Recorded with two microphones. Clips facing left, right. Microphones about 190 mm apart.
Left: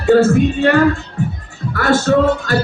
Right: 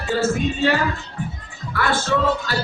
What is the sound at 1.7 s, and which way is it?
Speech, 45° left (ahead or behind).